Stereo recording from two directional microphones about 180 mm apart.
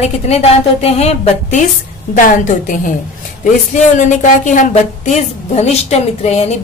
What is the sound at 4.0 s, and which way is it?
A woman's voice, 45° left (ahead or behind).